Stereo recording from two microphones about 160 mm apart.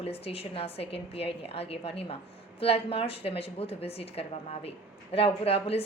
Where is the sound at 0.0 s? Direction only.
40° left (ahead or behind).